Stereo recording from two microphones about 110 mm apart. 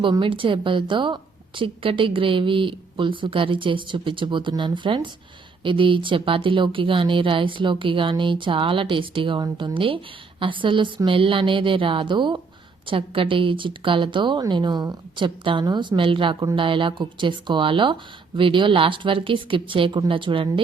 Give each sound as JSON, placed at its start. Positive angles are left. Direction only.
{"t": 0.2, "sound": "a woman's voice", "side_deg": -50}